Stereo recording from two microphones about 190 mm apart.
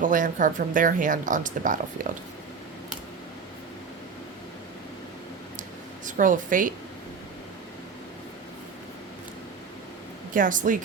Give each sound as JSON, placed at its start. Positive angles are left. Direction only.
{"t": 0.0, "sound": "speech", "side_deg": -45}
{"t": 6.1, "sound": "a woman's voice", "side_deg": -45}
{"t": 10.3, "sound": "speech", "side_deg": -45}